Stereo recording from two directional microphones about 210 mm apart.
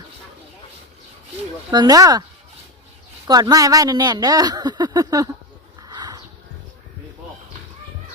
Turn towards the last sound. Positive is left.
turn(degrees=-20)  # may be behind; listen again after turning